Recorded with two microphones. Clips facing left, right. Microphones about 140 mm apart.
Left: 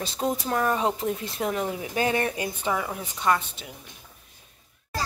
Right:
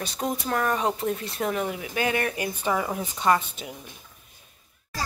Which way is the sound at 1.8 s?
30° left (ahead or behind).